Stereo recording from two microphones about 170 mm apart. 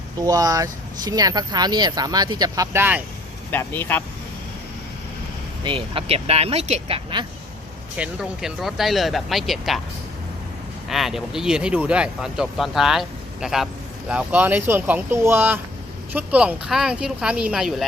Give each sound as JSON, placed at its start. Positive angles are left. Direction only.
{"t": 0.3, "sound": "speech", "side_deg": -20}
{"t": 3.5, "sound": "speech", "side_deg": 10}
{"t": 5.6, "sound": "speech", "side_deg": -30}
{"t": 7.9, "sound": "speech", "side_deg": -5}
{"t": 10.8, "sound": "speech", "side_deg": 0}